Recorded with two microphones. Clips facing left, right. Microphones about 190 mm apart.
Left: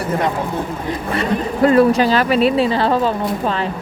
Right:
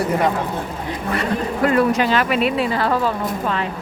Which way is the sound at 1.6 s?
30° left (ahead or behind).